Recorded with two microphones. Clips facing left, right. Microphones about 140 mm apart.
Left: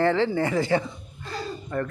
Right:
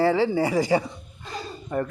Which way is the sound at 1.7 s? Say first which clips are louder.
Right 2 dB; 15° right (ahead or behind).